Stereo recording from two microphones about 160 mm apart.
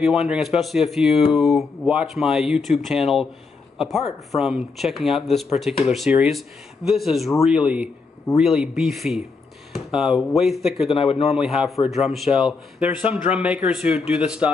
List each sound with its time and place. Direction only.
0.0 s speech: centre (ahead or behind)
10.9 s a man's voice: 40° left (ahead or behind)
11.4 s speech: centre (ahead or behind)